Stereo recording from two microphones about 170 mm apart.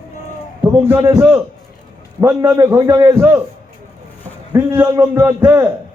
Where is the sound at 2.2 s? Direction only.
15° right (ahead or behind).